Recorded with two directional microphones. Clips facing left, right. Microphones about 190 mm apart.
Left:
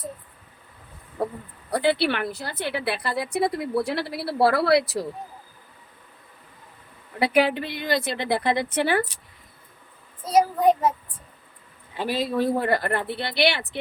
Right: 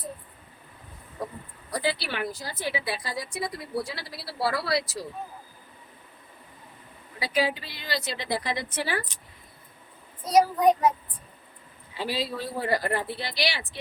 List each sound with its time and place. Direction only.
1.2 s a woman's voice: 60° left (ahead or behind)
7.2 s a woman's voice: 60° left (ahead or behind)
10.2 s a child's voice: 25° left (ahead or behind)
11.9 s a woman's voice: 50° left (ahead or behind)